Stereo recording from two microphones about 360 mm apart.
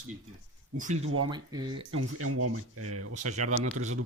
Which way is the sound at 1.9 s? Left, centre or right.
Right.